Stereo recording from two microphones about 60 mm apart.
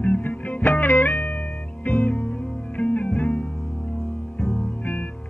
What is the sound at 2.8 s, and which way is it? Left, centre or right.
Music, left.